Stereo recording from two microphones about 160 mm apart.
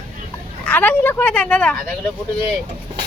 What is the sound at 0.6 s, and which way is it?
Speech, 10° left (ahead or behind).